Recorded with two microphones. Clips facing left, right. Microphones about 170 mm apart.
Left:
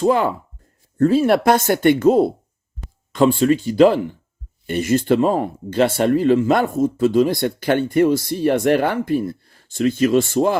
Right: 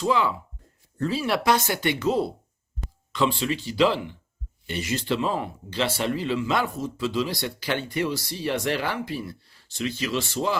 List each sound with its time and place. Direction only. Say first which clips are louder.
0.0 s speech: left 7 dB; 50° left (ahead or behind)